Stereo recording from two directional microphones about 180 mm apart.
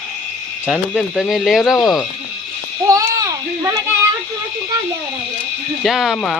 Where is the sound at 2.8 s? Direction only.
20° right (ahead or behind).